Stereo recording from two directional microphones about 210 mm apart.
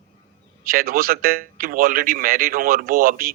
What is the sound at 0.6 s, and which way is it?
A man's voice, 45° right (ahead or behind).